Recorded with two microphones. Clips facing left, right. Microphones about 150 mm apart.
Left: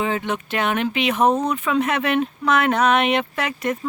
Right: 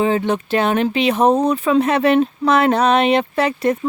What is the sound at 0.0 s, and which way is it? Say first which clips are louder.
Speech: right 6 dB; 35° right (ahead or behind).